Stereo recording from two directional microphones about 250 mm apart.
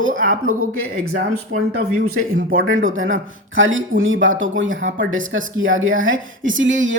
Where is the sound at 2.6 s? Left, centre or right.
Right.